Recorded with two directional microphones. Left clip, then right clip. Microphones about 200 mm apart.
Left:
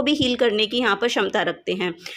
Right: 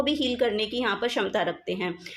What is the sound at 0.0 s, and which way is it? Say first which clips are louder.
A woman's voice: left 5 dB; 30° left (ahead or behind).